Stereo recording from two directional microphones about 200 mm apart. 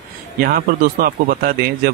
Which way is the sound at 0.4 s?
45° right (ahead or behind).